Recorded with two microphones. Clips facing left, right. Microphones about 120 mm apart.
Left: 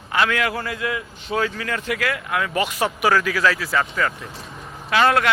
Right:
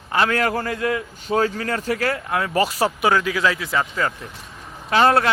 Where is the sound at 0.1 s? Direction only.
35° right (ahead or behind).